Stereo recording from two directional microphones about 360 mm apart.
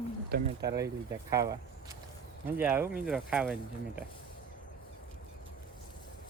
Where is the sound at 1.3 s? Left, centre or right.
Centre.